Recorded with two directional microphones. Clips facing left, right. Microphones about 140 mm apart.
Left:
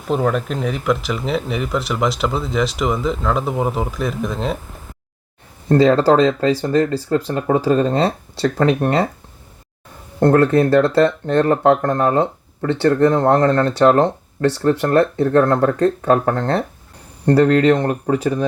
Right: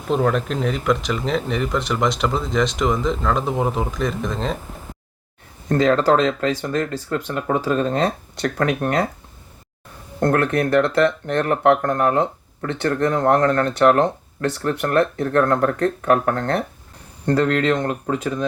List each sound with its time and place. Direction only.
0.1 s speech: 5° left (ahead or behind)
5.6 s speech: 35° left (ahead or behind)
10.2 s speech: 30° left (ahead or behind)